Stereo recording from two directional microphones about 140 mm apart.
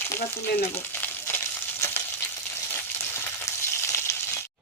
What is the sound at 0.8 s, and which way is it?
Frying, 15° left (ahead or behind).